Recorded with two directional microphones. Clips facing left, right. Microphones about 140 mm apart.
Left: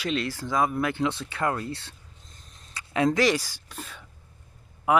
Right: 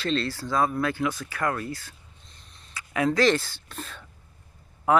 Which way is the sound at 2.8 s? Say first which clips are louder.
Left 1 dB; 30° left (ahead or behind).